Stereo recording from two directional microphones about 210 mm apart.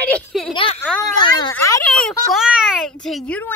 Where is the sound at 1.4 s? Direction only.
15° left (ahead or behind).